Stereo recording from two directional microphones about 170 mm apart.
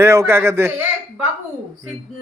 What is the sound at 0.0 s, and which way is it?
Speech, 15° right (ahead or behind).